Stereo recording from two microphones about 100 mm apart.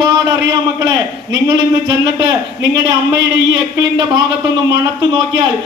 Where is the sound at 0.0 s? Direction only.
45° right (ahead or behind).